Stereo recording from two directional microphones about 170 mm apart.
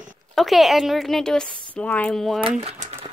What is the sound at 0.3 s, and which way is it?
A woman's voice, centre (ahead or behind).